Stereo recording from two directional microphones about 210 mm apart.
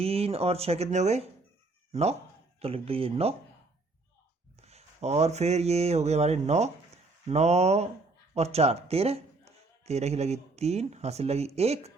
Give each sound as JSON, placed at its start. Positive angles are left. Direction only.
{"t": 0.0, "sound": "speech", "side_deg": -30}
{"t": 4.6, "sound": "mantra", "side_deg": -30}
{"t": 8.4, "sound": "a man's voice", "side_deg": -30}